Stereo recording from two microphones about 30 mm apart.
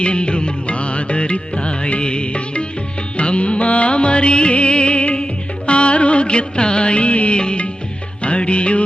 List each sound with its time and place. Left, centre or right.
0.0 s music: left
7.3 s music: left